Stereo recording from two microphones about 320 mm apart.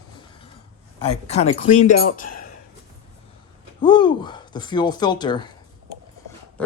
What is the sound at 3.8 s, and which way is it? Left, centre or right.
Speech, centre.